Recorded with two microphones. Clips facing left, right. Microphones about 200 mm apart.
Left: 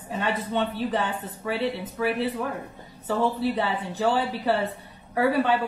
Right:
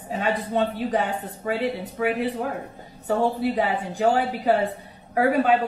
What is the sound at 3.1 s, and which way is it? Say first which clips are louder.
Speech: right 2 dB; 25° right (ahead or behind).